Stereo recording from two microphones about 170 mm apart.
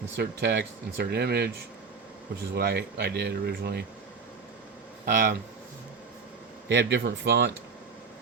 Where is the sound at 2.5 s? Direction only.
70° right (ahead or behind).